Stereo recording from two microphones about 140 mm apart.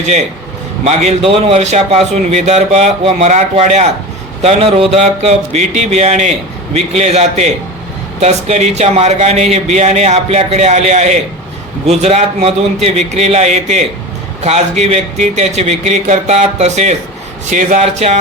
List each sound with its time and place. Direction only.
0.0 s a man's voice: 50° right (ahead or behind)